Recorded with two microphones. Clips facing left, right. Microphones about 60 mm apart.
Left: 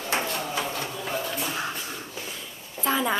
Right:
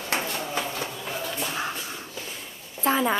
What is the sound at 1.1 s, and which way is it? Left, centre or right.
Shuffle, centre.